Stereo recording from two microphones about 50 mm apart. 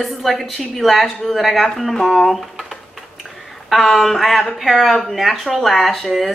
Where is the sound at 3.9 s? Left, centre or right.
Centre.